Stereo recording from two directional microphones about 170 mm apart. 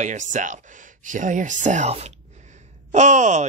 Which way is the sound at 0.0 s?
45° right (ahead or behind).